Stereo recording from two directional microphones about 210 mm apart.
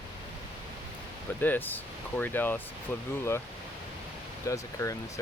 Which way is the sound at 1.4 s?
10° left (ahead or behind).